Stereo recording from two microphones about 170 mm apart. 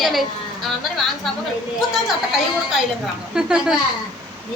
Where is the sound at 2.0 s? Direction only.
Centre (ahead or behind).